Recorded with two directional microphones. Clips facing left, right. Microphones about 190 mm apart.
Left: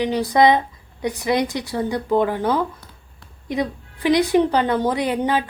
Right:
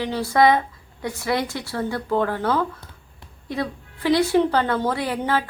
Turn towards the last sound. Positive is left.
turn(degrees=20)  # may be behind; listen again after turning